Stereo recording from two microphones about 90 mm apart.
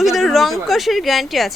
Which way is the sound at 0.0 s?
5° right (ahead or behind).